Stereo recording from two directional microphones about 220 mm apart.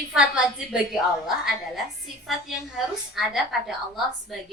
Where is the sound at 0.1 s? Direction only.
5° right (ahead or behind).